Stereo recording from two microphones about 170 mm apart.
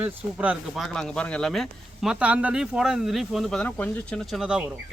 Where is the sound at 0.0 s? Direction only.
10° right (ahead or behind).